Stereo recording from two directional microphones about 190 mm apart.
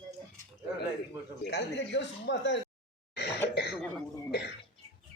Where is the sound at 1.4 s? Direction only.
65° left (ahead or behind).